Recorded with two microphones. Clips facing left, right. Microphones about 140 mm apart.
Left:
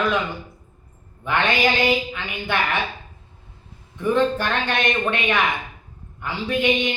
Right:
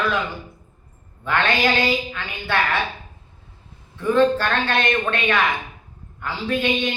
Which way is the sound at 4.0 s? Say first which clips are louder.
Right 2 dB; 15° left (ahead or behind).